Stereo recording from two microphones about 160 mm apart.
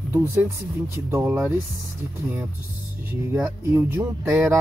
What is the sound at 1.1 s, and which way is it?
Speech, 15° right (ahead or behind).